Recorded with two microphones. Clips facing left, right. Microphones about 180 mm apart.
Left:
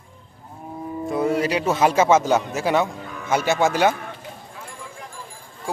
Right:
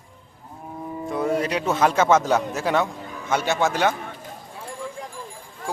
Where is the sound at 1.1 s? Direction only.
5° left (ahead or behind).